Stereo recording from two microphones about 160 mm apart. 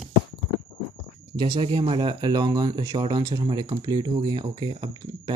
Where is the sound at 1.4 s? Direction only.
35° right (ahead or behind).